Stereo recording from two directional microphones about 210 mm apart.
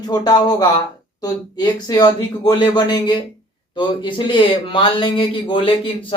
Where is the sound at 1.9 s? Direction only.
20° left (ahead or behind).